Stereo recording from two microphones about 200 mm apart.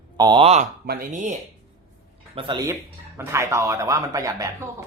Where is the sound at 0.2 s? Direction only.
25° right (ahead or behind).